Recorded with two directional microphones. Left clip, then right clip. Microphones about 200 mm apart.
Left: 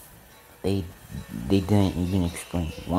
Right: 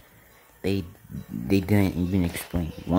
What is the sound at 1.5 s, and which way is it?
Speech, 20° right (ahead or behind).